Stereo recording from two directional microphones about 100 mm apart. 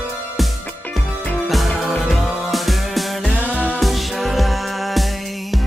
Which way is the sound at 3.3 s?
15° right (ahead or behind).